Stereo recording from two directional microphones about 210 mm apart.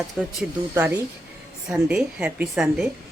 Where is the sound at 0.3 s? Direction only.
10° right (ahead or behind).